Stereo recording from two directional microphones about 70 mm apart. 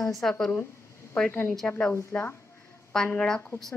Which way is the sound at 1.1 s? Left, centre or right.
Centre.